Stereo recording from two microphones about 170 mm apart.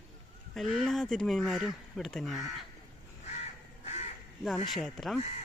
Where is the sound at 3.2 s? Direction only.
40° left (ahead or behind).